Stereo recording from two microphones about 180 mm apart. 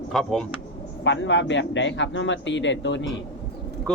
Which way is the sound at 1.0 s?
90° left.